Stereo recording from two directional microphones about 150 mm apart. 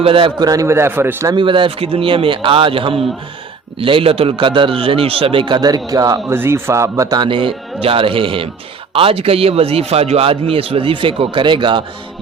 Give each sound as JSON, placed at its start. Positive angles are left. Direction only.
{"t": 0.0, "sound": "a man's voice", "side_deg": -35}
{"t": 1.4, "sound": "a man's voice", "side_deg": -35}